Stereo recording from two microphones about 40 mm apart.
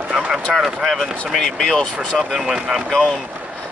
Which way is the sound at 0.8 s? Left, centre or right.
Centre.